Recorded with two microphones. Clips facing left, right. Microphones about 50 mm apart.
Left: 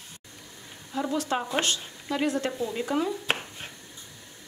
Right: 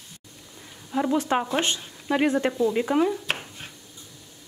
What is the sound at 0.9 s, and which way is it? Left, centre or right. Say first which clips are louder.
A woman's voice: right 5 dB; right.